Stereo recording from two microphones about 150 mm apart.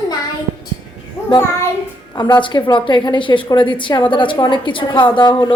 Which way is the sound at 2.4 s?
30° left (ahead or behind).